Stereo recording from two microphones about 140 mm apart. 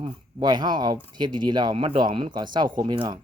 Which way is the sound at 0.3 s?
30° right (ahead or behind).